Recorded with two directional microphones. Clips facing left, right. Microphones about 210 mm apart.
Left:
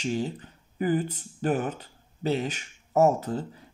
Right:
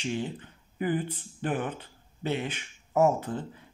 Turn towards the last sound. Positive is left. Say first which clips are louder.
# left 2 dB
turn(degrees=40)  # may be behind; listen again after turning